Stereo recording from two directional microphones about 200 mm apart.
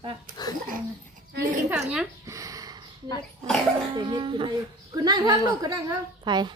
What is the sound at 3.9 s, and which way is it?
A woman's voice, 25° right (ahead or behind).